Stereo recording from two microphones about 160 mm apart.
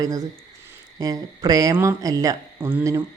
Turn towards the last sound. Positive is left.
turn(degrees=-20)  # may be behind; listen again after turning